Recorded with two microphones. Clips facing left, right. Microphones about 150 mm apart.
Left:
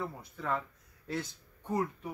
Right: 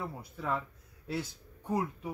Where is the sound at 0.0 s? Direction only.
10° right (ahead or behind).